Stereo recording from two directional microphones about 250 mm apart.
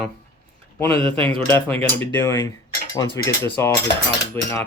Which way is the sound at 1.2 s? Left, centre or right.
Centre.